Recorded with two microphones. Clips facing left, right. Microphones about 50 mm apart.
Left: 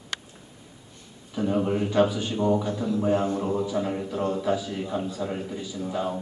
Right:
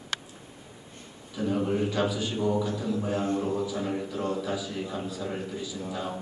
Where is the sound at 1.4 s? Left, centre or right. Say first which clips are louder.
Left 2 dB; centre.